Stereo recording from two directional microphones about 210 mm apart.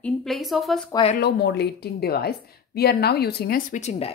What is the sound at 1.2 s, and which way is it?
A woman's voice, 50° left (ahead or behind).